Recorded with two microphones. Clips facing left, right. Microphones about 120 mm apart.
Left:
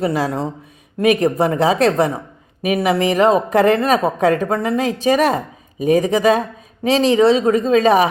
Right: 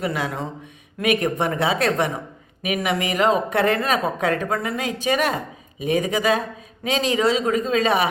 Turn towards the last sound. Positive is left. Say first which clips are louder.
# left 7 dB
turn(degrees=40)  # may be behind; listen again after turning